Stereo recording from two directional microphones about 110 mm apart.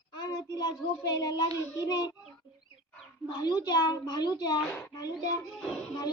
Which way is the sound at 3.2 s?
35° left (ahead or behind).